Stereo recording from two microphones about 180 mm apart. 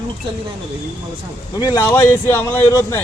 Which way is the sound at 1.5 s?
20° left (ahead or behind).